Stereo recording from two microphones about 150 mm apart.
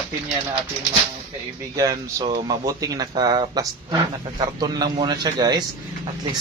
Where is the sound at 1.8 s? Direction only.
25° right (ahead or behind).